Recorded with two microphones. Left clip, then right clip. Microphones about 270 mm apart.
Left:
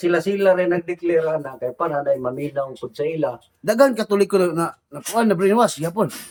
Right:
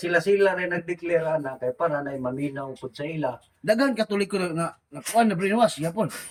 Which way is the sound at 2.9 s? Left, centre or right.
Centre.